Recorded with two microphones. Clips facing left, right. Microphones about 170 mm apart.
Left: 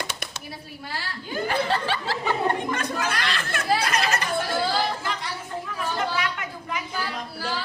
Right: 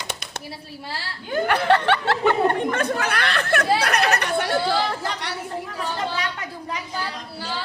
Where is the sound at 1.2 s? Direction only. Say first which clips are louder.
Right 6 dB; 65° right (ahead or behind).